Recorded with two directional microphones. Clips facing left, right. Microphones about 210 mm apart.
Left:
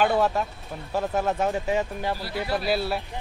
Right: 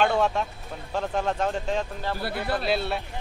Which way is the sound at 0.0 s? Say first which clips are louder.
Left 1 dB; 5° left (ahead or behind).